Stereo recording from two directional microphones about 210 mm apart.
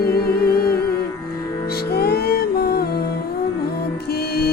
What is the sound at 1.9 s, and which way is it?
Music, 50° left (ahead or behind).